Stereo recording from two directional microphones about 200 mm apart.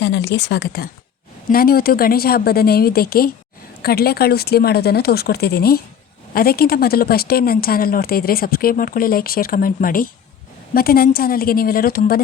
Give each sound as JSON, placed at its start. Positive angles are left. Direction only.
{"t": 0.0, "sound": "a woman's voice", "side_deg": 60}